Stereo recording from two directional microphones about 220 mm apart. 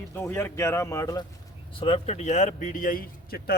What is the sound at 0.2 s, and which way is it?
Speech, 10° left (ahead or behind).